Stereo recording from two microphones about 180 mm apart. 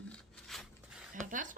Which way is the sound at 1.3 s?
45° right (ahead or behind).